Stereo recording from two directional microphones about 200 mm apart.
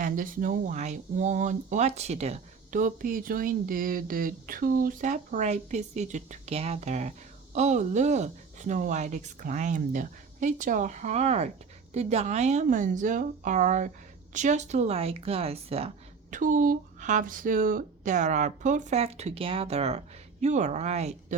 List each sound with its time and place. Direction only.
0.0 s speech: 45° right (ahead or behind)
16.3 s speech: 40° right (ahead or behind)